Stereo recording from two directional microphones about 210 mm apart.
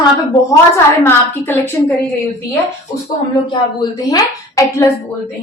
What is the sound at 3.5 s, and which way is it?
A woman's voice, 20° left (ahead or behind).